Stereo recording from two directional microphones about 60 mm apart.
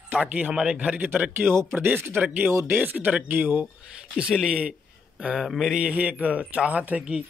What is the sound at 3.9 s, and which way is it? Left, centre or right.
Speech, centre.